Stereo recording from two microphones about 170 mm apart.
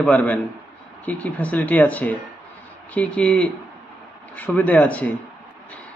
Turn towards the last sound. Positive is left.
turn(degrees=10)  # may be behind; listen again after turning